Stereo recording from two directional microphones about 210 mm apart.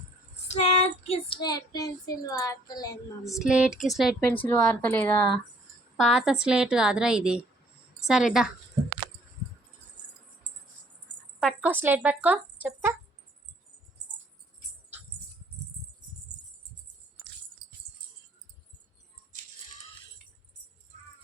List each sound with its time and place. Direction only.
0.4 s child singing: 30° left (ahead or behind)
3.3 s a woman's voice: 5° right (ahead or behind)
11.3 s speech: 5° right (ahead or behind)